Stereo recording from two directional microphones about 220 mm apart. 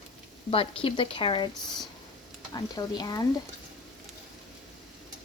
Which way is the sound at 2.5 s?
20° left (ahead or behind).